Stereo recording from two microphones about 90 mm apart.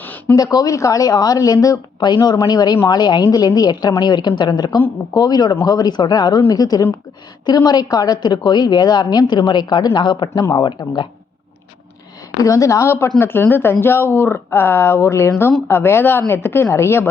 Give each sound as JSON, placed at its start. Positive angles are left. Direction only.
{"t": 0.0, "sound": "a sound", "side_deg": 20}
{"t": 0.3, "sound": "a woman's voice", "side_deg": 45}
{"t": 12.4, "sound": "speech", "side_deg": 35}